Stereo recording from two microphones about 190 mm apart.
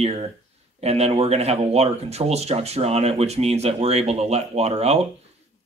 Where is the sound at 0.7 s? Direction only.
35° right (ahead or behind).